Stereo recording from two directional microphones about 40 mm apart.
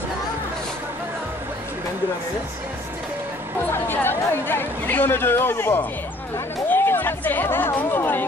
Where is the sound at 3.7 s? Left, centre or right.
Left.